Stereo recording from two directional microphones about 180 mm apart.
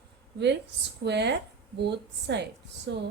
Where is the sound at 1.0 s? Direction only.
70° right (ahead or behind).